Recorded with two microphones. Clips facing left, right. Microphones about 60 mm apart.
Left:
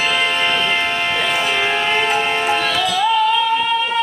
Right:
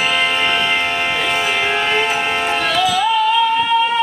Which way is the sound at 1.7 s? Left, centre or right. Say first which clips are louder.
Even; centre.